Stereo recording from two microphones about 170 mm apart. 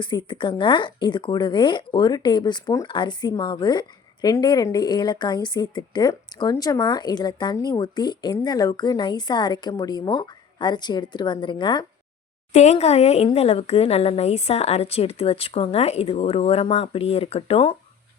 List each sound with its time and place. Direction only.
0.0 s speech: 25° left (ahead or behind)
12.5 s speech: 40° left (ahead or behind)